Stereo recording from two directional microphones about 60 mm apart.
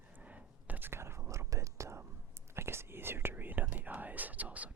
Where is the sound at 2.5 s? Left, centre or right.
Right.